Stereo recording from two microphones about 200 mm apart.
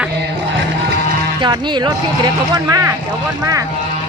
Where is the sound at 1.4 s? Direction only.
25° right (ahead or behind).